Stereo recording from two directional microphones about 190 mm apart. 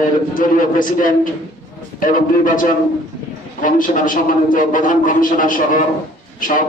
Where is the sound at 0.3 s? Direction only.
45° left (ahead or behind).